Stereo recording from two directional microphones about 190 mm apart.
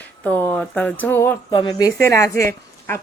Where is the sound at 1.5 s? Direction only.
20° left (ahead or behind).